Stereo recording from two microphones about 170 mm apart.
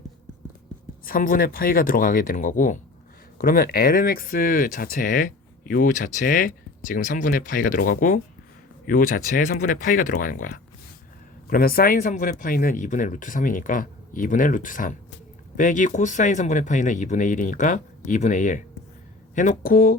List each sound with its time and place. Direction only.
1.0 s speech: 55° left (ahead or behind)